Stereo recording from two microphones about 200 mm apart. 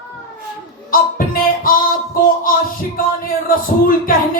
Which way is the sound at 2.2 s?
45° left (ahead or behind).